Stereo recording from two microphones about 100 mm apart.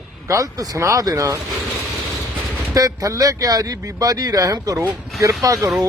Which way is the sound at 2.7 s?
35° right (ahead or behind).